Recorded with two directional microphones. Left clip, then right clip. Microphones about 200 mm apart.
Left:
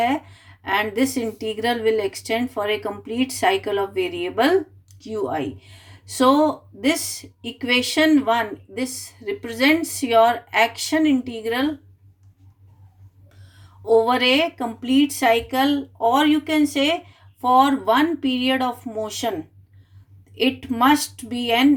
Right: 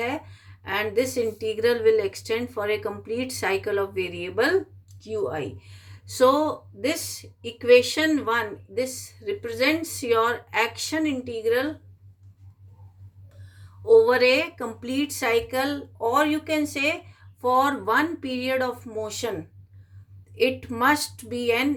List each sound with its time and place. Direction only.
0.7 s speech: 20° left (ahead or behind)
13.9 s speech: 15° left (ahead or behind)
20.3 s speech: 20° left (ahead or behind)